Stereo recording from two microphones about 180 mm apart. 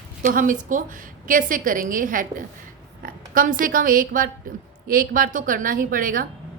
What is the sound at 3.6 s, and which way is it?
A woman's voice, 50° right (ahead or behind).